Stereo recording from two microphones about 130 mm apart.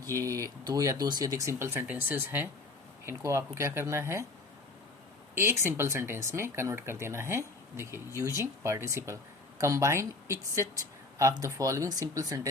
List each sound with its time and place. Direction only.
0.0 s speech: 25° right (ahead or behind)
5.3 s speech: 20° right (ahead or behind)